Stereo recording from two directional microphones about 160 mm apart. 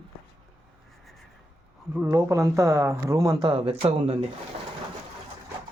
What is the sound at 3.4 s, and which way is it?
Speech, 35° right (ahead or behind).